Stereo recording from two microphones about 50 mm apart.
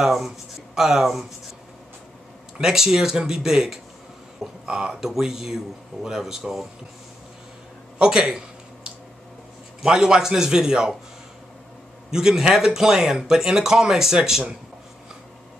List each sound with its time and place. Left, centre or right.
0.0 s speech: centre
2.5 s speech: centre
8.0 s speech: centre
9.8 s speech: centre
12.1 s speech: centre